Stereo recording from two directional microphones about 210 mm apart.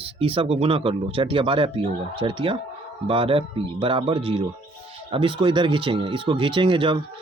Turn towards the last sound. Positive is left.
turn(degrees=-25)  # may be behind; listen again after turning